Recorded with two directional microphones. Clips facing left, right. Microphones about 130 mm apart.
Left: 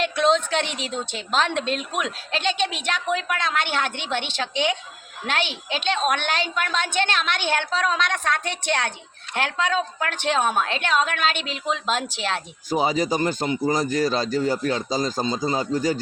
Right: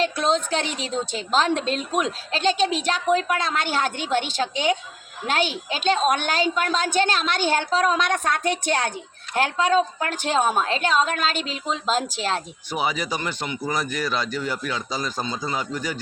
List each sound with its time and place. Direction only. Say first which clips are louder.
0.0 s a woman's voice: left 2 dB; 40° right (ahead or behind)
12.7 s speech: left 4 dB; 35° left (ahead or behind)